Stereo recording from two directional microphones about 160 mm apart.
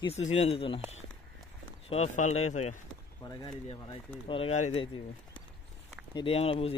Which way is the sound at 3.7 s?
35° left (ahead or behind).